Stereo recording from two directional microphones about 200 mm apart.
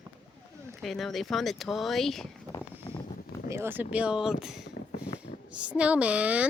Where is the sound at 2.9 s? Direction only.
20° left (ahead or behind).